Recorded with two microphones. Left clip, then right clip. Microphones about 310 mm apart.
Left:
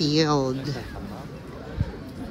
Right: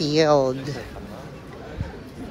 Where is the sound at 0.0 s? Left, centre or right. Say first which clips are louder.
Right 4 dB; centre.